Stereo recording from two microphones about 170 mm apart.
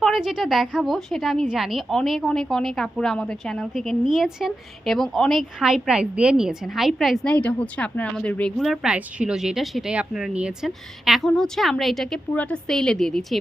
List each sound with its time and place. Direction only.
0.0 s a woman's voice: centre (ahead or behind)